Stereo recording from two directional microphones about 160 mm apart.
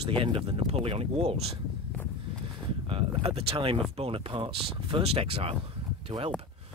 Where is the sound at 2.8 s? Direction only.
35° right (ahead or behind).